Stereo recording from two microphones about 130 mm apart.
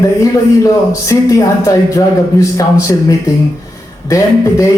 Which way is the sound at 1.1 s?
25° left (ahead or behind).